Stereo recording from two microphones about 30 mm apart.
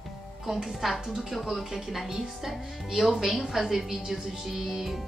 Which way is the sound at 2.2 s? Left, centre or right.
Centre.